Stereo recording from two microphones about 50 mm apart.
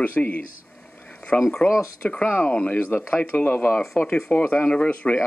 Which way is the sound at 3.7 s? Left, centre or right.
Centre.